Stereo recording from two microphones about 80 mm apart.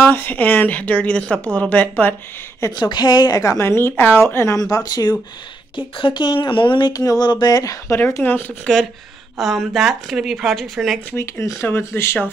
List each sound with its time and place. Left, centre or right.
0.0 s speech: left
2.7 s a woman's voice: left
4.6 s a woman's voice: left
5.8 s speech: left
6.9 s a woman's voice: left
7.2 s a woman's voice: left
7.9 s speech: left
9.4 s speech: centre
11.1 s speech: left